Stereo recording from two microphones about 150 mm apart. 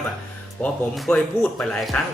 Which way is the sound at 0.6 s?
5° left (ahead or behind).